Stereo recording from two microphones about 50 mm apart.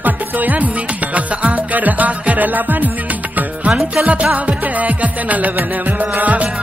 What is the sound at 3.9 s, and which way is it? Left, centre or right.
Music, right.